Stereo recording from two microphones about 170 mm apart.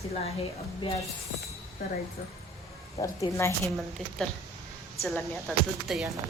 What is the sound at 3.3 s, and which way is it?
Speech, 15° left (ahead or behind).